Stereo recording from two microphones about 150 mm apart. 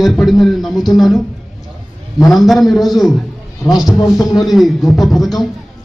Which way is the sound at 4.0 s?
25° left (ahead or behind).